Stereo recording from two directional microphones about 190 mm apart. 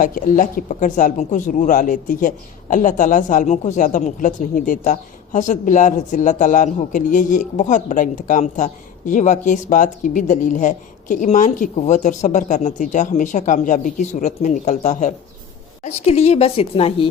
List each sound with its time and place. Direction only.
0.0 s speech: 45° left (ahead or behind)